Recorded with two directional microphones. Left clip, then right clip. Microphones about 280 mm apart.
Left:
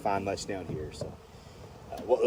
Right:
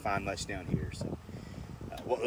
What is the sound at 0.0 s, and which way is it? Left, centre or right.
Speech, centre.